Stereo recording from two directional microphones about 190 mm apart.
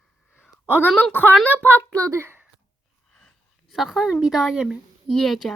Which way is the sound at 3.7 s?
Centre (ahead or behind).